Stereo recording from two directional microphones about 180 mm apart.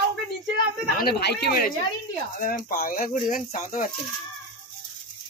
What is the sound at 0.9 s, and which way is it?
Speech, 60° left (ahead or behind).